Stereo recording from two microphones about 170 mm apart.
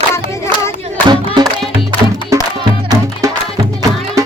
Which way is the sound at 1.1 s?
25° right (ahead or behind).